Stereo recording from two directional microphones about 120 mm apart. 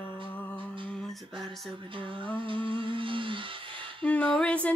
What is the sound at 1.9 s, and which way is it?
Humming, 45° right (ahead or behind).